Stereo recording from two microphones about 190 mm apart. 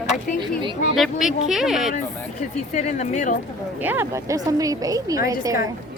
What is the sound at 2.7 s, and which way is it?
Speech, 35° left (ahead or behind).